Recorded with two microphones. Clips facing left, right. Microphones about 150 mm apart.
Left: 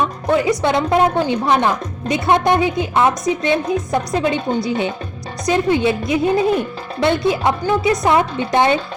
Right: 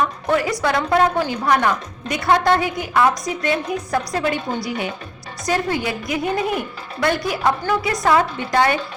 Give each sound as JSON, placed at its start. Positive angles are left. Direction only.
{"t": 0.0, "sound": "music", "side_deg": 20}
{"t": 0.6, "sound": "a woman's voice", "side_deg": 20}